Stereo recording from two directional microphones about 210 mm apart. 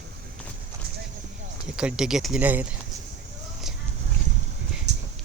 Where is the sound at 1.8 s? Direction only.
5° right (ahead or behind).